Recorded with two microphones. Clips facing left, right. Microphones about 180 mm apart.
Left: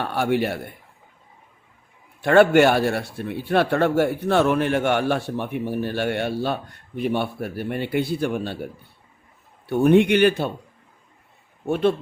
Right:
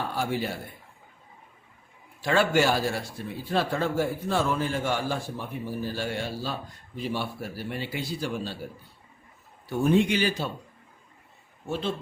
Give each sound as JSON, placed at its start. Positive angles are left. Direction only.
{"t": 0.0, "sound": "a man's voice", "side_deg": 70}
{"t": 2.2, "sound": "speech", "side_deg": 60}
{"t": 9.6, "sound": "speech", "side_deg": 60}
{"t": 11.6, "sound": "speech", "side_deg": 60}